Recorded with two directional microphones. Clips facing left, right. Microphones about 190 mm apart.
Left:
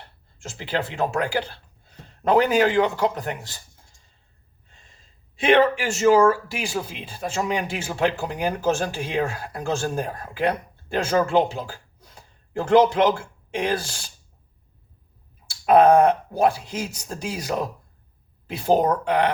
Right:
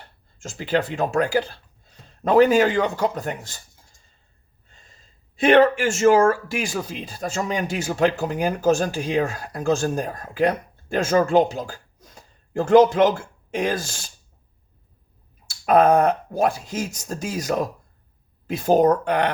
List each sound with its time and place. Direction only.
0.3 s speech: 45° right (ahead or behind)
5.4 s speech: 45° right (ahead or behind)
15.7 s speech: 45° right (ahead or behind)
18.5 s speech: 45° right (ahead or behind)